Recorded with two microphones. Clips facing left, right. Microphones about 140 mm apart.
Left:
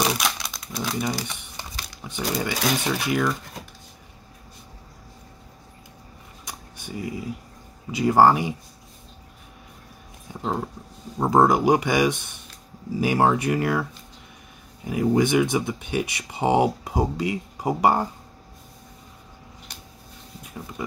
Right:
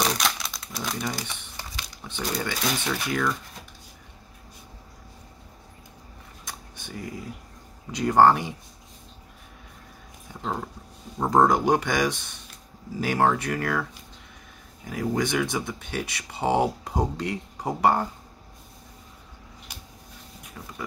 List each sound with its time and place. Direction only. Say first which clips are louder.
0.0 s crumpling: left 2 dB; 5° left (ahead or behind)
2.1 s speech: left 3 dB; 10° left (ahead or behind)
6.4 s a sound: left 2 dB; 10° left (ahead or behind)
7.9 s speech: left 1 dB; 5° left (ahead or behind)
10.4 s speech: left 4 dB; 15° left (ahead or behind)
14.9 s speech: left 6 dB; 15° left (ahead or behind)
20.6 s speech: left 5 dB; 15° left (ahead or behind)